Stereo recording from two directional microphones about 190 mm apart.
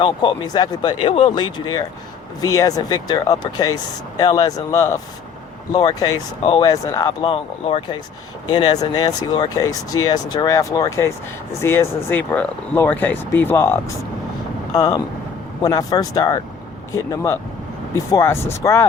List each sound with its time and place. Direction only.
0.0 s speech: 25° left (ahead or behind)